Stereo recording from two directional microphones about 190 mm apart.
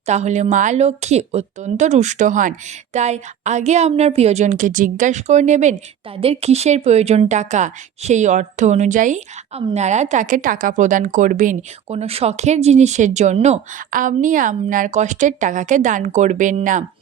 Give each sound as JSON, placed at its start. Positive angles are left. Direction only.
{"t": 0.0, "sound": "a woman's voice", "side_deg": -35}